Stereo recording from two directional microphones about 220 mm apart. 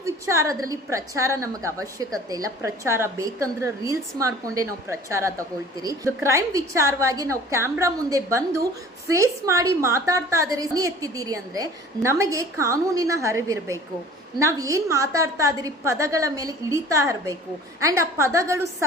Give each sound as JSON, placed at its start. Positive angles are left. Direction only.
{"t": 0.0, "sound": "a woman's voice", "side_deg": -15}